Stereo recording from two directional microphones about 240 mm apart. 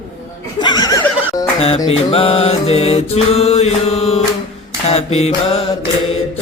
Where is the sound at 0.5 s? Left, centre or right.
Centre.